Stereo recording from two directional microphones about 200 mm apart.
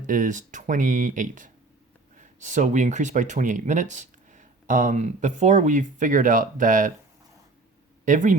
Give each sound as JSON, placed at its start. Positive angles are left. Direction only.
{"t": 0.1, "sound": "speech", "side_deg": -40}
{"t": 8.0, "sound": "speech", "side_deg": -40}